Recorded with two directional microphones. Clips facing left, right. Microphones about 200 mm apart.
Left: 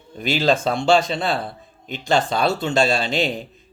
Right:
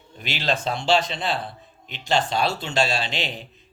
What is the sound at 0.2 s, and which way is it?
Speech, 45° left (ahead or behind).